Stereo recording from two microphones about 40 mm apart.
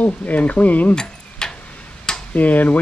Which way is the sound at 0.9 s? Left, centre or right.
Centre.